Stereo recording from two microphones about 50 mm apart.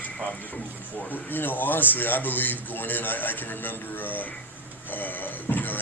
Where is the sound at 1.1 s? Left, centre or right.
Left.